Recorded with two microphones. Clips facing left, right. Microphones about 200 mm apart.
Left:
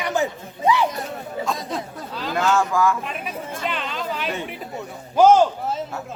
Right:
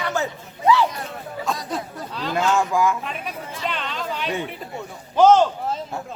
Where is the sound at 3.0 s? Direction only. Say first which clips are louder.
Left 1 dB; centre (ahead or behind).